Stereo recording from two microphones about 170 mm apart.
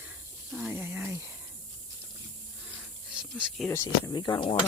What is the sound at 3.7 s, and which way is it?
Speech, 15° left (ahead or behind).